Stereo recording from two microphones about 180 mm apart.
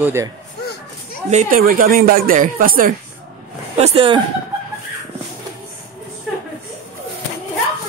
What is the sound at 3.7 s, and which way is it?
Speech, 35° right (ahead or behind).